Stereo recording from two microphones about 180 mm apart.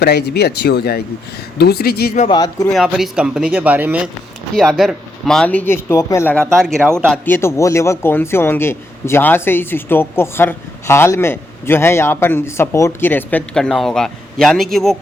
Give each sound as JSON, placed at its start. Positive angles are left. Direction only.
{"t": 0.0, "sound": "speech", "side_deg": 65}
{"t": 2.6, "sound": "a man's voice", "side_deg": 0}